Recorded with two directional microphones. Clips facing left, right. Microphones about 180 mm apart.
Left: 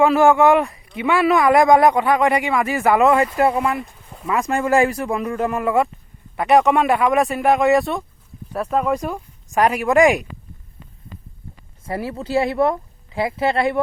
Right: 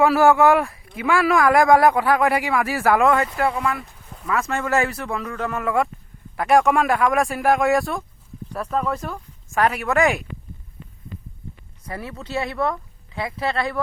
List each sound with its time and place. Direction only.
0.0 s speech: 5° right (ahead or behind)
3.3 s speech: 20° left (ahead or behind)
11.9 s speech: 30° left (ahead or behind)